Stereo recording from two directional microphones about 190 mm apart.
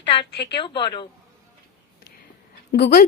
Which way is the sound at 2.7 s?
60° left (ahead or behind).